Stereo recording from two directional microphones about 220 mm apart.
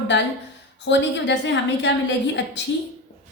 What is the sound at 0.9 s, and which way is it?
A woman's voice, 55° left (ahead or behind).